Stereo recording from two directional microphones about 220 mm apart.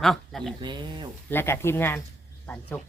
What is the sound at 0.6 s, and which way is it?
Speech, 20° right (ahead or behind).